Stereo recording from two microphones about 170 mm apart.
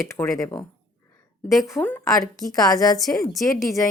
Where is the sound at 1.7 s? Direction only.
10° left (ahead or behind).